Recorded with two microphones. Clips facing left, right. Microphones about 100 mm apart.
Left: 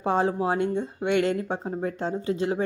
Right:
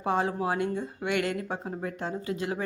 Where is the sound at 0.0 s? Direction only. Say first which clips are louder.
Left 4 dB; 30° left (ahead or behind).